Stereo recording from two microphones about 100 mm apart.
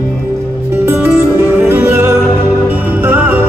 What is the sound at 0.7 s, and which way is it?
Music, 20° right (ahead or behind).